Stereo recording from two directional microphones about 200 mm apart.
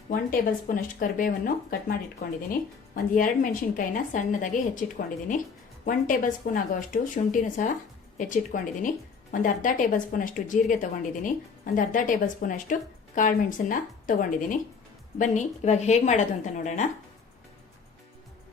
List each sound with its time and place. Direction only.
0.1 s a woman's voice: 45° left (ahead or behind)